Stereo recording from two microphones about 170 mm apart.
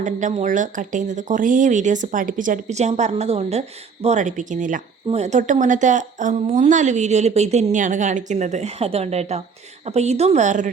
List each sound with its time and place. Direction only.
0.0 s a woman's voice: 45° right (ahead or behind)